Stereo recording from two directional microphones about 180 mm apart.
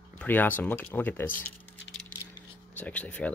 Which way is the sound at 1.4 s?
10° left (ahead or behind).